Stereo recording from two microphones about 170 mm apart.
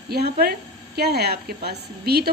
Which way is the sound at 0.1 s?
70° right (ahead or behind).